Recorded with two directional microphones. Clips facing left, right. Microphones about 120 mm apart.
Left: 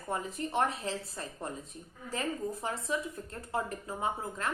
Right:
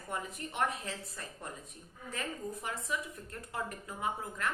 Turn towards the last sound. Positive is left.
turn(degrees=30)  # may be behind; listen again after turning